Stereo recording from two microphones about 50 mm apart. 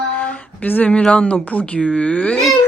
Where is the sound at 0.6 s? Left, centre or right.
Left.